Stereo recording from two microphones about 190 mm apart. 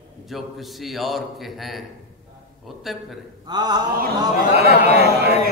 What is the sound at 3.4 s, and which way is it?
Mantra, 20° right (ahead or behind).